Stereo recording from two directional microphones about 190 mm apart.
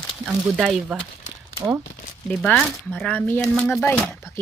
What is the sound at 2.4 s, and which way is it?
Speech, 5° left (ahead or behind).